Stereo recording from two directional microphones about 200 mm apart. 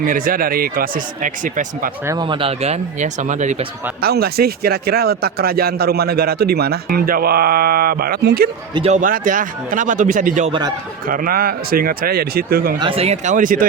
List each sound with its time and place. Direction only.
0.0 s a man's voice: 45° right (ahead or behind)
2.0 s speech: 20° right (ahead or behind); by 3.7 s 35° right (ahead or behind)
4.0 s a man's voice: 50° right (ahead or behind)
8.7 s speech: 30° right (ahead or behind)
9.0 s a man's voice: 45° right (ahead or behind)
12.8 s speech: 30° right (ahead or behind)